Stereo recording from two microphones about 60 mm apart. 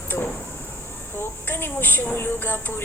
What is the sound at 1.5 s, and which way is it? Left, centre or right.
A woman's voice, left.